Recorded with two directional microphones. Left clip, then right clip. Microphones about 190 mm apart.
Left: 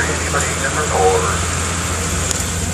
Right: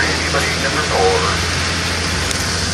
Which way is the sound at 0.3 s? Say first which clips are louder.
Right 2 dB; 60° left (ahead or behind).